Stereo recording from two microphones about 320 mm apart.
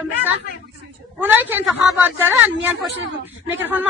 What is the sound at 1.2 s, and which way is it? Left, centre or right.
A woman's voice, centre.